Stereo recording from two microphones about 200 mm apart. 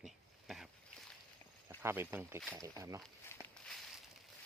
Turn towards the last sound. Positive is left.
turn(degrees=10)  # may be behind; listen again after turning